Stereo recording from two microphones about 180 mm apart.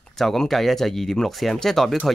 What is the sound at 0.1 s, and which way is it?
Speech, centre (ahead or behind).